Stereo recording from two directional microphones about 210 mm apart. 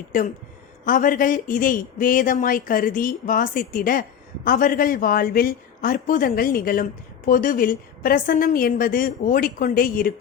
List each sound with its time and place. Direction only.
0.1 s speech: 40° left (ahead or behind)